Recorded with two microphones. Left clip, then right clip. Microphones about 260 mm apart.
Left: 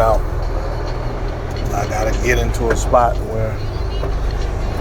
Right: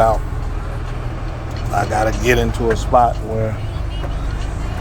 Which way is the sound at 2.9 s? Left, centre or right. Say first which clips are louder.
Right 1 dB; right.